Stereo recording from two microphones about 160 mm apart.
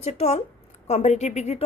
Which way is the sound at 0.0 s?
45° left (ahead or behind).